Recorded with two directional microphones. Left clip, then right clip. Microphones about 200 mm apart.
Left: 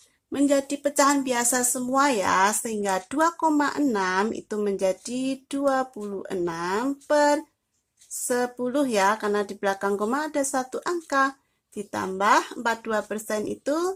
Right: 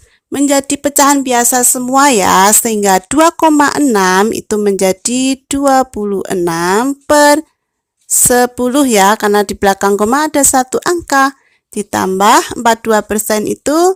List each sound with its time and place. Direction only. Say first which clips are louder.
0.3 s speech: right 10 dB; 55° right (ahead or behind)